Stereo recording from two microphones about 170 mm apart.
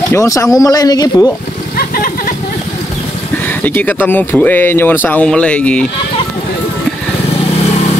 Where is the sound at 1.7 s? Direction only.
60° left (ahead or behind).